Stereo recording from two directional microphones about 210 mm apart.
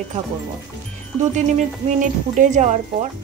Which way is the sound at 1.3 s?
35° right (ahead or behind).